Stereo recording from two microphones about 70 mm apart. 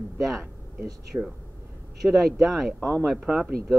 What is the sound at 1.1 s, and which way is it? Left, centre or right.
Speech, right.